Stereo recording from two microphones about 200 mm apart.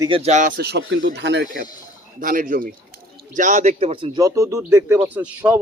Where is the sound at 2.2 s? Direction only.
45° right (ahead or behind).